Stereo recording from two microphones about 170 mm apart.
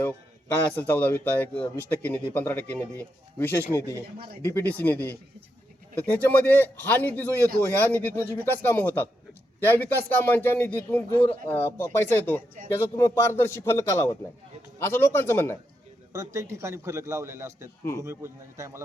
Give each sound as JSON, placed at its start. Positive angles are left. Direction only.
{"t": 0.0, "sound": "speech", "side_deg": 10}
{"t": 16.1, "sound": "a man's voice", "side_deg": -20}